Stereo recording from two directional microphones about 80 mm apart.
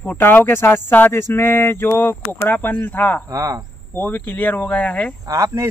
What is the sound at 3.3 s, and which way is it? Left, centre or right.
Speech, right.